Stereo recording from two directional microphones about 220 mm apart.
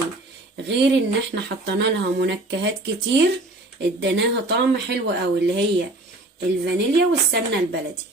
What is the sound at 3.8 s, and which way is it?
Speech, 50° right (ahead or behind).